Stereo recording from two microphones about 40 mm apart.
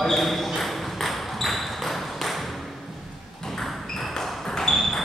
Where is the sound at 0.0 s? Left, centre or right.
Centre.